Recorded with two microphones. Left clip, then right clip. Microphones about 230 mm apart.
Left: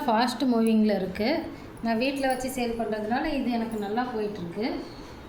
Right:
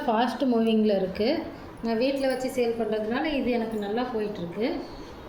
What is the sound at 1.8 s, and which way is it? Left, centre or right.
A woman's voice, left.